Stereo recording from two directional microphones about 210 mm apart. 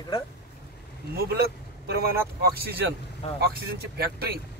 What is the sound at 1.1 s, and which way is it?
Speech, 50° right (ahead or behind).